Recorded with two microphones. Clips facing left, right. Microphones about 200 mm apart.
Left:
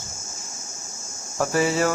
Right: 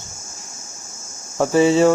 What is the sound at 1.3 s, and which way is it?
Speech, 25° right (ahead or behind).